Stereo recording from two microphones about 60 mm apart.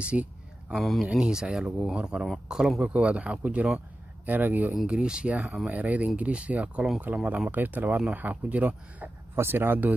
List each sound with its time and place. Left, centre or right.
0.0 s a sound: centre
0.7 s speech: centre
1.1 s speech: centre; by 4.7 s right
4.8 s speech: centre
9.3 s speech: right